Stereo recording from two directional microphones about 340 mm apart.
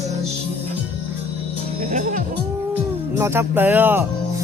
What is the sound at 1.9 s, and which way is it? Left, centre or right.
Speech, right.